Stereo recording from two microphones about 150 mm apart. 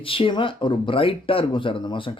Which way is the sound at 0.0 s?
35° left (ahead or behind).